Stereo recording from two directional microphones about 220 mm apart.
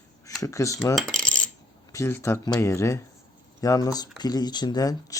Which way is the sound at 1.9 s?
10° left (ahead or behind).